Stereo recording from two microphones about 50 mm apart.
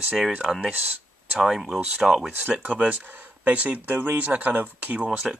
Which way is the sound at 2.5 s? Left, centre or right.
Right.